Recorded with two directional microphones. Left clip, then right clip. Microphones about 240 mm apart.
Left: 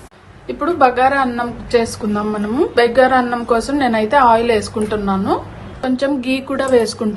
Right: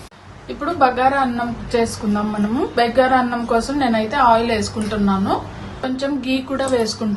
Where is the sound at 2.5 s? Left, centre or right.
Left.